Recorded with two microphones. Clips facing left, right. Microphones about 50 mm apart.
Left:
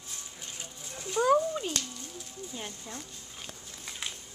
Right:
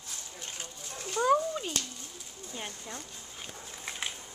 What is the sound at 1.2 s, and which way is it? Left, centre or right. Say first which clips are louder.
Cat: left 1 dB; centre.